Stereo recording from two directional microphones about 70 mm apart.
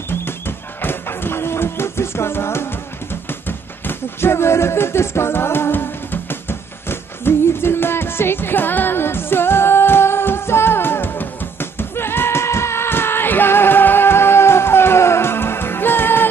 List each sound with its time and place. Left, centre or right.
0.8 s music: left
3.4 s speech: left
6.9 s music: left